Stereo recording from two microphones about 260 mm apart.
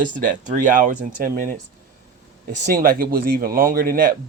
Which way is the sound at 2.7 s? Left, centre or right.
Right.